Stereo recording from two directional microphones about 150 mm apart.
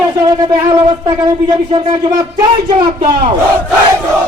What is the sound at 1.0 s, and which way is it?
Speech, 30° right (ahead or behind).